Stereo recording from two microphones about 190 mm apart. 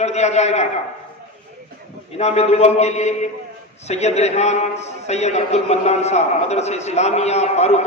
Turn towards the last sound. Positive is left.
turn(degrees=35)  # may be behind; listen again after turning